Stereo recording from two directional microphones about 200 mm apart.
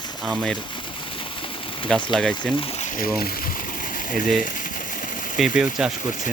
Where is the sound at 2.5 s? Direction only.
30° left (ahead or behind).